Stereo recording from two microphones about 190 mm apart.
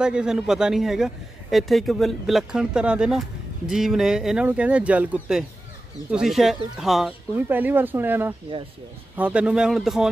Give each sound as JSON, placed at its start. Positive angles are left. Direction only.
{"t": 0.0, "sound": "a man's voice", "side_deg": -5}